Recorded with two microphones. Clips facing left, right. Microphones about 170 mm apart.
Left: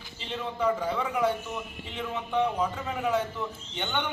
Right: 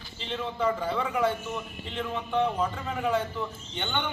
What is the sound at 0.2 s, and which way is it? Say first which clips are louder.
Speech: right 1 dB; 5° left (ahead or behind).